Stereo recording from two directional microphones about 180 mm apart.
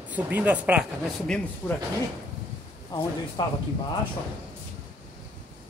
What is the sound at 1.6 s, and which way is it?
Speech, 15° left (ahead or behind).